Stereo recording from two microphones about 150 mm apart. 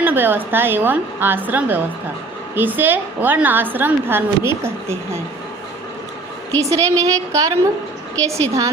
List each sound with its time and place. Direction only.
0.0 s a woman's voice: 15° right (ahead or behind)
6.6 s a woman's voice: 20° right (ahead or behind)